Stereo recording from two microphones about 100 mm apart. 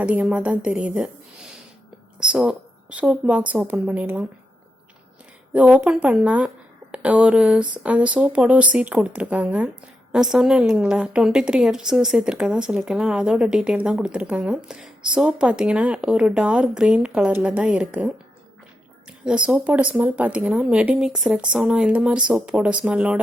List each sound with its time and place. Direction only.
0.0 s a woman's voice: 10° right (ahead or behind)
5.5 s a woman's voice: 10° right (ahead or behind)
19.5 s a woman's voice: 15° right (ahead or behind)